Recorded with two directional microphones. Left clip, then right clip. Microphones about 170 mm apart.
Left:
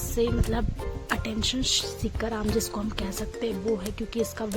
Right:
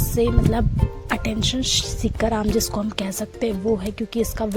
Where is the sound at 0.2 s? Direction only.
35° right (ahead or behind).